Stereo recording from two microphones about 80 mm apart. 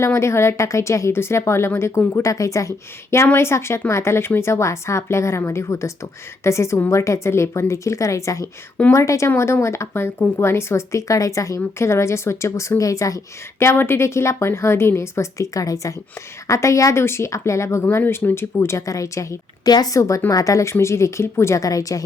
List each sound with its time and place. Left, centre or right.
0.0 s a woman's voice: left
17.9 s a woman's voice: left
18.8 s a woman's voice: left
19.6 s a woman's voice: left